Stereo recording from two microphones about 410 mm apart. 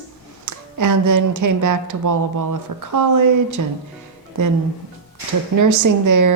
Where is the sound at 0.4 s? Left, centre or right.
Right.